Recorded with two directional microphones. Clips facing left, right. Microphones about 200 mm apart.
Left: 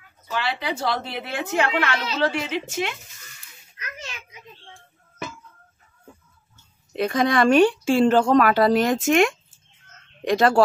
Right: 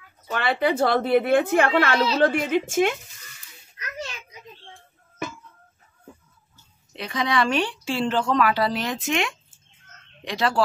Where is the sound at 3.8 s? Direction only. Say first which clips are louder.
Right 4 dB; 35° right (ahead or behind).